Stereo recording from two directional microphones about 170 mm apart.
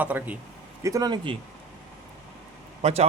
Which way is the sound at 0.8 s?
20° right (ahead or behind).